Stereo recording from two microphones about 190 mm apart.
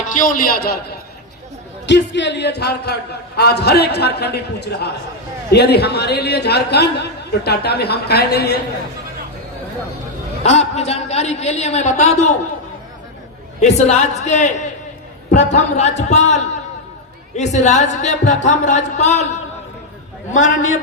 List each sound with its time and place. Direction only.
0.1 s a man's voice: 45° left (ahead or behind)
1.9 s a man's voice: 70° left (ahead or behind)
10.4 s a woman's voice: 35° left (ahead or behind)
13.6 s a woman's voice: 35° left (ahead or behind)